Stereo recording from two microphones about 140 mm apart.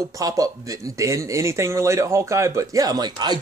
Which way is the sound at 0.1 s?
25° right (ahead or behind).